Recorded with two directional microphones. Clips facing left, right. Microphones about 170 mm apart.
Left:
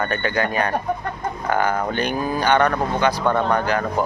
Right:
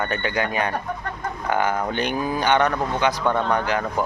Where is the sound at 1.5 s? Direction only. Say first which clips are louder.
Left 1 dB; 20° right (ahead or behind).